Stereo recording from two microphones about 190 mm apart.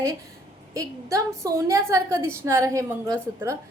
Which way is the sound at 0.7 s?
15° right (ahead or behind).